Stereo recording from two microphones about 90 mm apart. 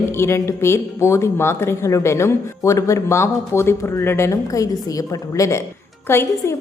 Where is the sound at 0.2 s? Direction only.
30° left (ahead or behind).